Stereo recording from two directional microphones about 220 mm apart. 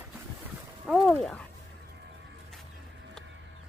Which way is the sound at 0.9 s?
Centre (ahead or behind).